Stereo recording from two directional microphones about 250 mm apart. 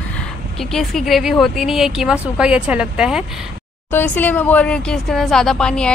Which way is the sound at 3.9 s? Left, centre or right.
Centre.